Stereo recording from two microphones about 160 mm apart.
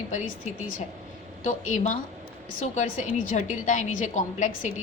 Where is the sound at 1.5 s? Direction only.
50° left (ahead or behind).